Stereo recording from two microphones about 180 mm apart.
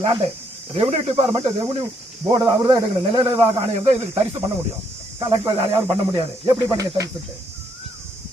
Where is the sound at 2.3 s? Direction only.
25° right (ahead or behind).